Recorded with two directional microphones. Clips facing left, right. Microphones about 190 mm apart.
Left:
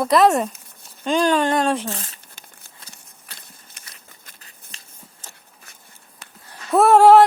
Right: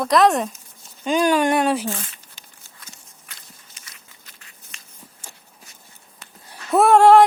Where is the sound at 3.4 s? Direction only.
60° left (ahead or behind).